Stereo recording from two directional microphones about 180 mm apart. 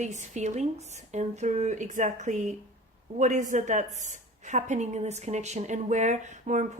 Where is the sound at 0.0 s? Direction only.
40° right (ahead or behind).